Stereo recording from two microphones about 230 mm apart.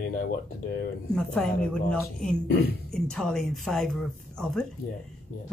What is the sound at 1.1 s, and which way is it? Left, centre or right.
Speech, centre.